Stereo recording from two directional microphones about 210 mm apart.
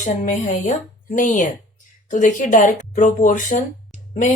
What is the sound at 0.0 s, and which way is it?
Speech, 35° left (ahead or behind).